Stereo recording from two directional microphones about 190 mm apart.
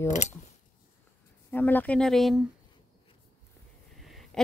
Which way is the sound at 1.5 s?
10° left (ahead or behind).